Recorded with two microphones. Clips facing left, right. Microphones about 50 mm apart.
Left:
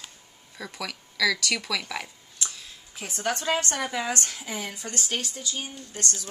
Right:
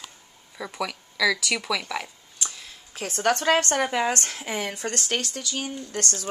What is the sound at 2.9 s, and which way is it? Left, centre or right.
Speech, right.